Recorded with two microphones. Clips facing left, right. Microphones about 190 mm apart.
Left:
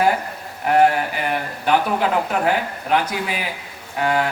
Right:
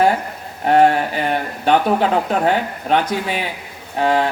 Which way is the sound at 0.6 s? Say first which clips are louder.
Right 3 dB; 30° right (ahead or behind).